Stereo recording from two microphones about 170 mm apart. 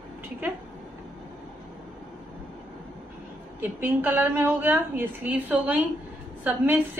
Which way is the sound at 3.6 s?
10° right (ahead or behind).